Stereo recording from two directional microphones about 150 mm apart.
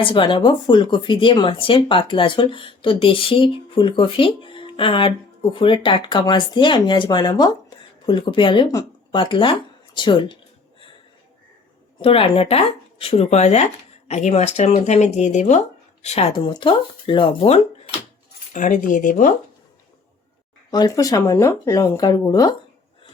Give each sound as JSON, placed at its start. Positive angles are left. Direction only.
{"t": 0.0, "sound": "speech", "side_deg": 35}
{"t": 11.9, "sound": "speech", "side_deg": 35}
{"t": 16.3, "sound": "speech", "side_deg": 30}
{"t": 18.5, "sound": "speech", "side_deg": 60}
{"t": 20.7, "sound": "speech", "side_deg": 25}